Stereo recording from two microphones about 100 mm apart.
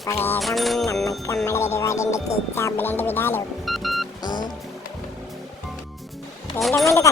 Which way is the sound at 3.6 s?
Centre (ahead or behind).